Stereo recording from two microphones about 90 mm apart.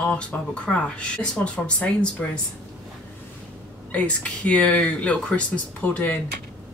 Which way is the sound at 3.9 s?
15° left (ahead or behind).